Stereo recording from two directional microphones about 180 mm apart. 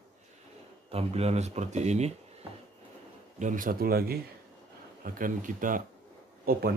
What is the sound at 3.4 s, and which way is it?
Speech, 45° right (ahead or behind).